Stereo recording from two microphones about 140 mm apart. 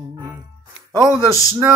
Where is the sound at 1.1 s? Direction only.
25° left (ahead or behind).